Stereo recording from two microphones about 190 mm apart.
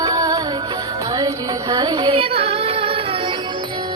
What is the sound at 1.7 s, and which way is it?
Music, 20° right (ahead or behind).